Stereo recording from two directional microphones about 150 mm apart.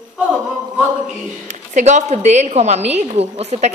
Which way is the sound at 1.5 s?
50° right (ahead or behind).